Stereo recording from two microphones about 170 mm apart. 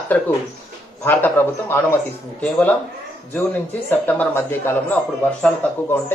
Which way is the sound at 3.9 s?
10° left (ahead or behind).